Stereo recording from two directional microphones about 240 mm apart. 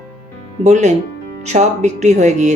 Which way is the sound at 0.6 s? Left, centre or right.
Right.